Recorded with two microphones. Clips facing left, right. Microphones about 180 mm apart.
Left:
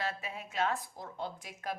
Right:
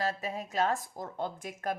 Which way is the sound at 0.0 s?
40° right (ahead or behind).